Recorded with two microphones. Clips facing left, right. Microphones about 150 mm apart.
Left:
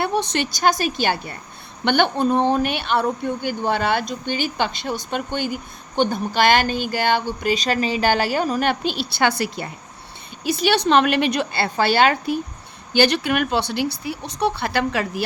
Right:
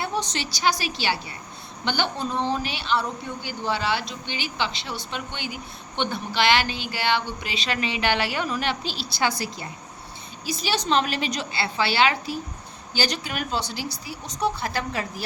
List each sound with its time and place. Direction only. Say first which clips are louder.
0.0 s speech: left 6 dB; 60° left (ahead or behind)
12.9 s speech: left 10 dB; 60° left (ahead or behind)